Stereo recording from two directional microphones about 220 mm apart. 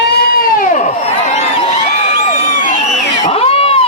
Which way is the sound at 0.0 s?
45° left (ahead or behind).